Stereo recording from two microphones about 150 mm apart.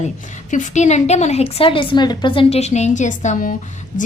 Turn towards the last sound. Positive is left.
turn(degrees=60)  # may be behind; listen again after turning